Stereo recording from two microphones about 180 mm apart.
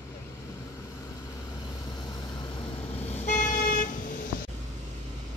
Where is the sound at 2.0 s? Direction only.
25° left (ahead or behind); by 4.2 s 50° left (ahead or behind).